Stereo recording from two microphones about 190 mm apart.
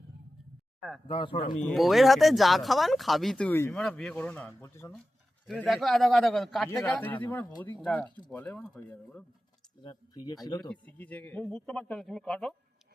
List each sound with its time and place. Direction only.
0.8 s speech: centre (ahead or behind)
1.0 s speech: 25° left (ahead or behind)
1.7 s speech: centre (ahead or behind)
5.5 s speech: centre (ahead or behind)
9.8 s speech: 20° left (ahead or behind)
10.7 s speech: 5° left (ahead or behind)